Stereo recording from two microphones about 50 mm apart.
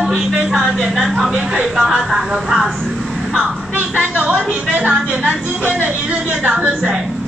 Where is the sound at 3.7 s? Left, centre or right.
Right.